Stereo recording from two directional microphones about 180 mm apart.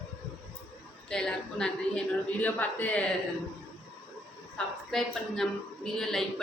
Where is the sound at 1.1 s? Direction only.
5° left (ahead or behind).